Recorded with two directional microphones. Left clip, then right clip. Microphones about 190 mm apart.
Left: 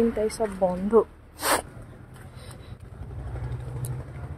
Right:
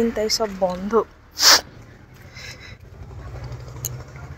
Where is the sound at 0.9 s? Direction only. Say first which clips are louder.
Right 1 dB; 15° left (ahead or behind).